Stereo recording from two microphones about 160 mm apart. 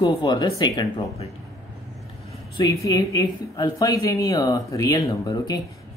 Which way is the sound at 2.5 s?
20° left (ahead or behind).